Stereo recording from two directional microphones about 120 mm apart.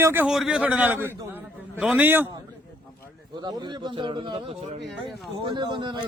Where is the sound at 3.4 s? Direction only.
40° right (ahead or behind).